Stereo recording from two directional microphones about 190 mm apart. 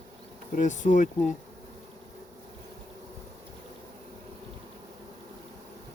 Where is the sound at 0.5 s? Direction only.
40° left (ahead or behind).